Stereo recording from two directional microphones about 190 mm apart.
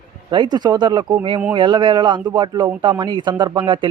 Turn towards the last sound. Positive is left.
turn(degrees=-25)  # may be behind; listen again after turning